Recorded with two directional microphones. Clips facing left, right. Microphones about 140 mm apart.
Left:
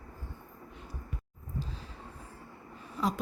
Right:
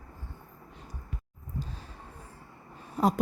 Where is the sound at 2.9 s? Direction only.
45° right (ahead or behind).